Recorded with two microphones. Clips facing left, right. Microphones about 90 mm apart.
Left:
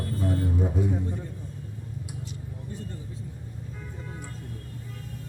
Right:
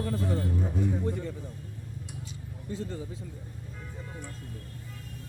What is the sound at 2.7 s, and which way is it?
Speech, 90° right.